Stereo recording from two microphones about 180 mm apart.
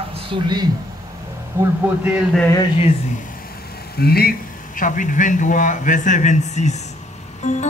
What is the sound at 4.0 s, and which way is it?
A man's voice, 60° left (ahead or behind).